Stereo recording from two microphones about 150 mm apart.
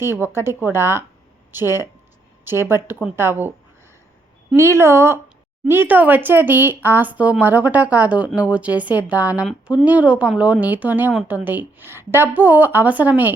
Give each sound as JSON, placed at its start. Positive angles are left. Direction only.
{"t": 0.0, "sound": "speech", "side_deg": -15}
{"t": 4.5, "sound": "speech", "side_deg": -20}